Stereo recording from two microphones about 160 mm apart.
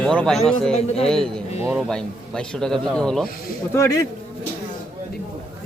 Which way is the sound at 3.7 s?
20° left (ahead or behind).